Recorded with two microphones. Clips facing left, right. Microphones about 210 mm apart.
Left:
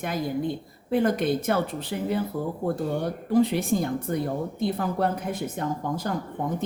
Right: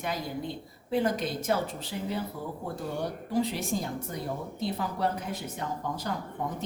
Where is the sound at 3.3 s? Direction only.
55° left (ahead or behind).